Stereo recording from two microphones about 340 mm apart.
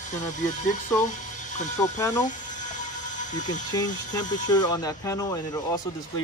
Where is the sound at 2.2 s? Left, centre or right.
Left.